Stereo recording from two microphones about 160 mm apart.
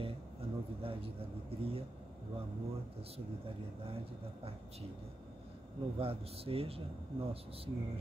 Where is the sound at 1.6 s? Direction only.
35° right (ahead or behind).